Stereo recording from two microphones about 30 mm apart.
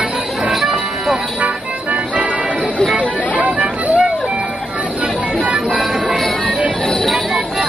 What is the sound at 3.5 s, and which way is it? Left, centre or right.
Music, right.